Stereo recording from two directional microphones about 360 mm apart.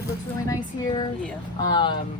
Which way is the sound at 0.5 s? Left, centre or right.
Centre.